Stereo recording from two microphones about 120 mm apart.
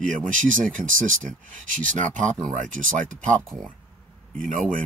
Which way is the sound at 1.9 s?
90° right.